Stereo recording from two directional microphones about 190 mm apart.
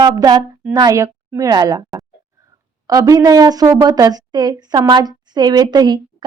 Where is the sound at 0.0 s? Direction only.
20° right (ahead or behind).